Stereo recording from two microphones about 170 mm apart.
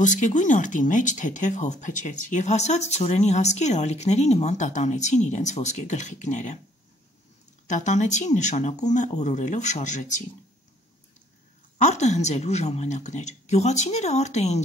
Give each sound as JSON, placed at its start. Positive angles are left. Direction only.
{"t": 0.0, "sound": "speech", "side_deg": 45}
{"t": 7.6, "sound": "speech", "side_deg": 45}
{"t": 11.8, "sound": "speech", "side_deg": 40}